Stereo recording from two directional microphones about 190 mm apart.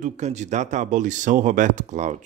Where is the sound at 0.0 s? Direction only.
35° right (ahead or behind).